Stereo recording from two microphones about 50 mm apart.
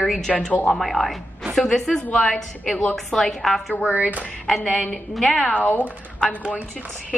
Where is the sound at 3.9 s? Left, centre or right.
Right.